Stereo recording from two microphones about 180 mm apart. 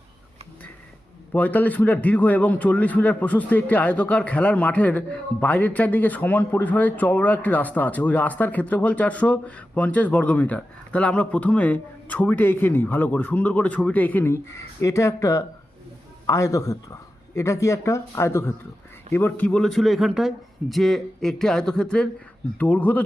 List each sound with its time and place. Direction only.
1.3 s a man's voice: 10° left (ahead or behind)